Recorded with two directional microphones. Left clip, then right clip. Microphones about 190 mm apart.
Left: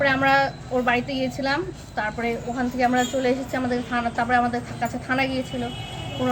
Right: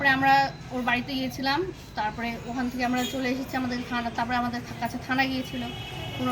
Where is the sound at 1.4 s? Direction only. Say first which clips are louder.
Left 2 dB; centre (ahead or behind).